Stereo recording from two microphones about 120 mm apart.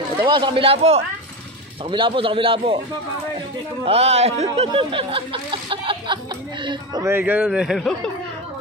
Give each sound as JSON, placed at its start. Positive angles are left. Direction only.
{"t": 0.2, "sound": "speech", "side_deg": -45}
{"t": 1.9, "sound": "speech", "side_deg": -45}
{"t": 3.8, "sound": "a man's voice", "side_deg": -55}
{"t": 4.6, "sound": "speech", "side_deg": -50}
{"t": 7.0, "sound": "speech", "side_deg": -20}
{"t": 7.4, "sound": "speech", "side_deg": 0}